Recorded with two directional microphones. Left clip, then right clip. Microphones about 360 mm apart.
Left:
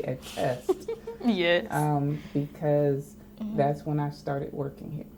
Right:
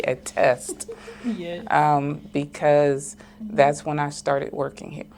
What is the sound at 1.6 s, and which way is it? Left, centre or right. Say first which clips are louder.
Speech: right 10 dB; centre.